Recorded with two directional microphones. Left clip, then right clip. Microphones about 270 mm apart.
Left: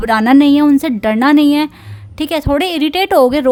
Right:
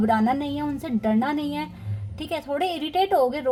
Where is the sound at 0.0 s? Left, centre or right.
Left.